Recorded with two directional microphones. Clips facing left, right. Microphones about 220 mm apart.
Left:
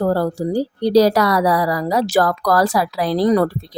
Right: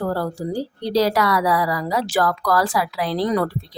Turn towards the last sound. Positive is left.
turn(degrees=35)  # may be behind; listen again after turning